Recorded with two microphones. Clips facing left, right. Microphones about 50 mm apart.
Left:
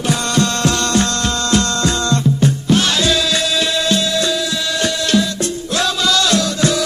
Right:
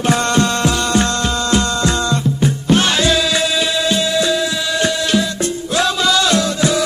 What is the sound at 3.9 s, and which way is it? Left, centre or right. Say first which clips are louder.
Music: right 1 dB; centre.